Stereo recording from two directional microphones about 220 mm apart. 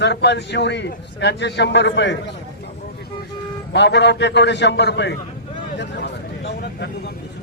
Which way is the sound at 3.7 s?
50° left (ahead or behind).